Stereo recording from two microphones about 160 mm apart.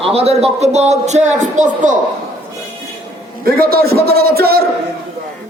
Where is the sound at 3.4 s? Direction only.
70° right (ahead or behind).